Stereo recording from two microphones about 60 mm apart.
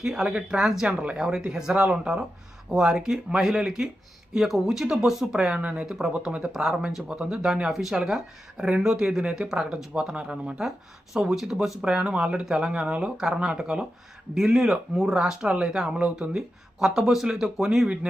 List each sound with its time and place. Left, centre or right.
0.0 s speech: centre
5.5 s speech: right
5.8 s speech: centre
7.1 s speech: centre